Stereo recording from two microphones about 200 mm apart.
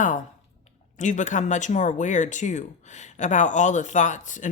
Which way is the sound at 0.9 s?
35° left (ahead or behind).